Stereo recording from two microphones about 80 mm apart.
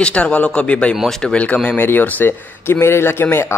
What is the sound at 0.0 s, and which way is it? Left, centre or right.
Speech, centre.